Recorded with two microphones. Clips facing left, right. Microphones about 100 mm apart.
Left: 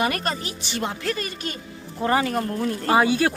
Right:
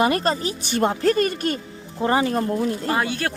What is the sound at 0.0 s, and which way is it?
Speech, 30° right (ahead or behind).